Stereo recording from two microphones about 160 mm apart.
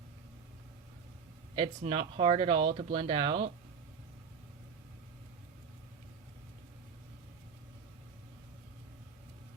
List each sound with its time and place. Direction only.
1.5 s speech: 35° right (ahead or behind)